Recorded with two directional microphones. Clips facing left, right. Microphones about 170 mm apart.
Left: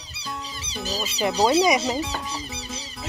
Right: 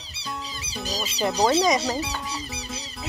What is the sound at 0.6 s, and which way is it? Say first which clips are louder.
Music: left 2 dB; 5° right (ahead or behind).